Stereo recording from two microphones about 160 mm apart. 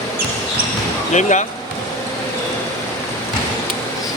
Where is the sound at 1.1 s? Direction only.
50° left (ahead or behind).